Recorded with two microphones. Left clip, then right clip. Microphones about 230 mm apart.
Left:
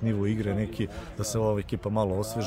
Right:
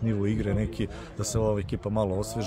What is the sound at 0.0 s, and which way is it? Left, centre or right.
A man's voice, centre.